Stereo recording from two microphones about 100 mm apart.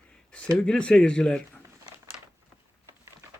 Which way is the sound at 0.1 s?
10° left (ahead or behind).